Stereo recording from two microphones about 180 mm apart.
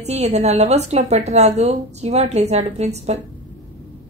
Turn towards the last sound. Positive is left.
turn(degrees=-40)  # may be behind; listen again after turning